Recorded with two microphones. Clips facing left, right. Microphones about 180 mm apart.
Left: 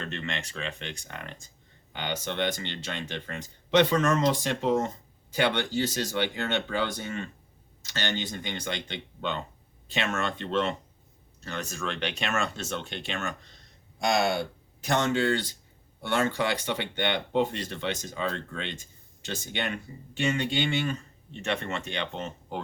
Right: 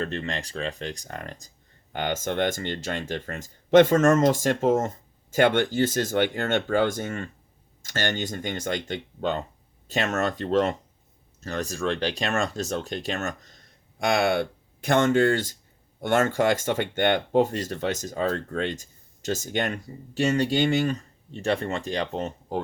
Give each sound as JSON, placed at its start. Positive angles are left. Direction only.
{"t": 0.0, "sound": "speech", "side_deg": -35}
{"t": 14.0, "sound": "speech", "side_deg": -55}